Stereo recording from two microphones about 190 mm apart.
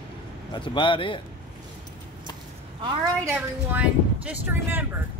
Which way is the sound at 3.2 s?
10° right (ahead or behind).